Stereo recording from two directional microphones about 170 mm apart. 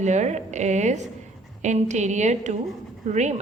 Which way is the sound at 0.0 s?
45° right (ahead or behind).